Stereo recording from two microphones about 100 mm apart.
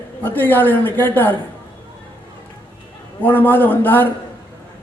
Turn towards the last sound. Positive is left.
turn(degrees=20)  # may be behind; listen again after turning